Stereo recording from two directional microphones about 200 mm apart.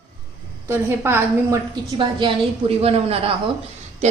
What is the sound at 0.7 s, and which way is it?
Speech, 10° right (ahead or behind).